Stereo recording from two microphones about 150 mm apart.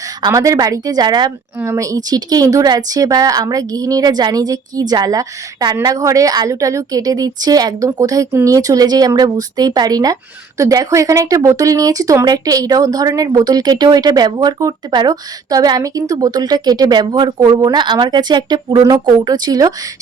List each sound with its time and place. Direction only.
0.2 s speech: 20° right (ahead or behind)